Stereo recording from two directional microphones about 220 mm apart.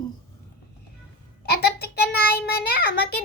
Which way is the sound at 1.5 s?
45° left (ahead or behind).